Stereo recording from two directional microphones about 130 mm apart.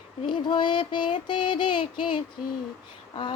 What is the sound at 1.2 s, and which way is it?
Music, 35° left (ahead or behind).